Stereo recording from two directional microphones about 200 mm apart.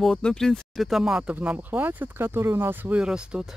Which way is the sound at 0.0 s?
5° left (ahead or behind).